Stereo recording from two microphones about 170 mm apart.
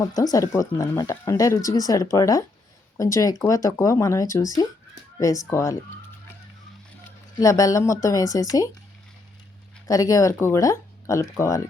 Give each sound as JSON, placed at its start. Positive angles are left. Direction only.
{"t": 0.0, "sound": "speech", "side_deg": 20}
{"t": 7.3, "sound": "speech", "side_deg": 20}
{"t": 9.8, "sound": "speech", "side_deg": 20}